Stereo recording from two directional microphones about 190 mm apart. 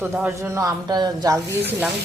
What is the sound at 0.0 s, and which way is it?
Speech, 15° right (ahead or behind).